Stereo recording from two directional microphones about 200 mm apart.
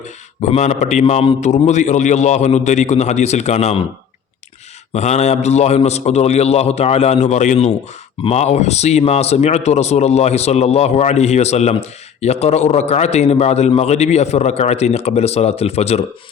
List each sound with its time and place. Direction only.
0.4 s speech: 35° left (ahead or behind)
4.9 s speech: 35° left (ahead or behind)